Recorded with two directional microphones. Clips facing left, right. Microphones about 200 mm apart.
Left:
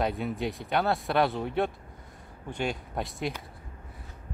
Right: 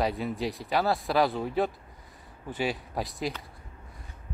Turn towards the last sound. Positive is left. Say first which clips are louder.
# even
turn(degrees=0)  # may be behind; listen again after turning